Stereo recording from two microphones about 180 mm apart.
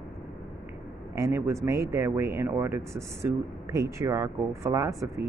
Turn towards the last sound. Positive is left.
turn(degrees=-15)  # may be behind; listen again after turning